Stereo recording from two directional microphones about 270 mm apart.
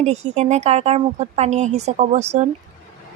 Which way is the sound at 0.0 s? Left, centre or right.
Right.